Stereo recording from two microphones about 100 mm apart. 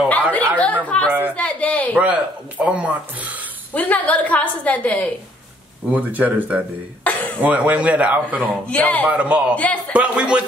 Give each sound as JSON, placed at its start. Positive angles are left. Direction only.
{"t": 0.1, "sound": "chatter", "side_deg": 15}
{"t": 1.3, "sound": "a sound", "side_deg": 15}
{"t": 2.0, "sound": "a man's voice", "side_deg": -15}
{"t": 3.7, "sound": "a woman's voice", "side_deg": 15}
{"t": 5.9, "sound": "a man's voice", "side_deg": -15}
{"t": 8.6, "sound": "a woman's voice", "side_deg": 15}
{"t": 9.0, "sound": "a man's voice", "side_deg": -15}